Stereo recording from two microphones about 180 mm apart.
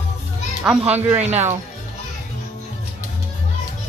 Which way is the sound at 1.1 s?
35° right (ahead or behind).